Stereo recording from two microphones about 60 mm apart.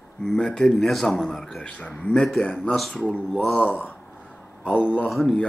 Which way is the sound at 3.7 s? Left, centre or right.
Left.